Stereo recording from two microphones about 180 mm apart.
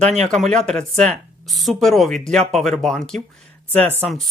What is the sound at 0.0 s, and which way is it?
Speech, 35° right (ahead or behind).